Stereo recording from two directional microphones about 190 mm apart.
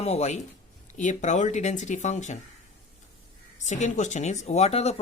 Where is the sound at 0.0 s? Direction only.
35° left (ahead or behind).